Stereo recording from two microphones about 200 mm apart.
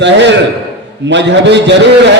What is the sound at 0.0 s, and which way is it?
A man's voice, 60° right (ahead or behind).